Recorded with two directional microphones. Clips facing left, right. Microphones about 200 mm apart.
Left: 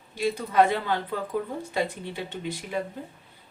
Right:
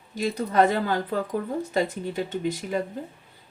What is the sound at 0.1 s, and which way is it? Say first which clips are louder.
A woman's voice: right 1 dB; 40° right (ahead or behind).